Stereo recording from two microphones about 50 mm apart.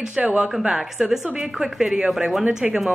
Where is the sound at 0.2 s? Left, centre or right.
Centre.